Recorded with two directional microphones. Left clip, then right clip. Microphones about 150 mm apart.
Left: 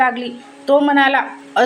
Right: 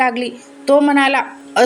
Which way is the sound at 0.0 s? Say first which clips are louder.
Even; 35° right (ahead or behind).